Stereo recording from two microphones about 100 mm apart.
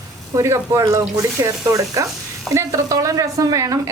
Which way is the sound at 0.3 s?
30° right (ahead or behind).